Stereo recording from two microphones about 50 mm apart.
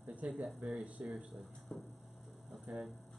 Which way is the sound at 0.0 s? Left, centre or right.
Right.